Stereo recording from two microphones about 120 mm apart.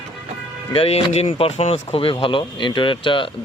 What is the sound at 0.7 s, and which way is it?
Speech, 55° left (ahead or behind).